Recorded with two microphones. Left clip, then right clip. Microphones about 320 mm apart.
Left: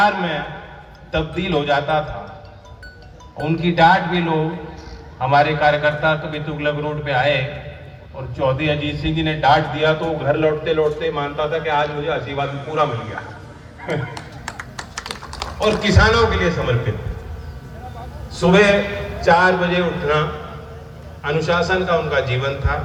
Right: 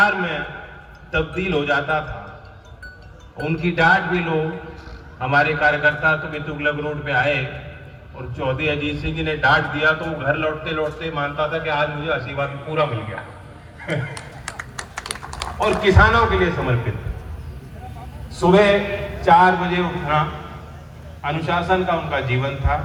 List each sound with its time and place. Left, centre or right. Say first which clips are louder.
0.0 s a man's voice: left 1 dB; left
3.3 s a man's voice: left 3 dB; left
14.1 s a sound: left 2 dB; left
15.6 s a man's voice: even; centre
18.3 s a man's voice: left 1 dB; right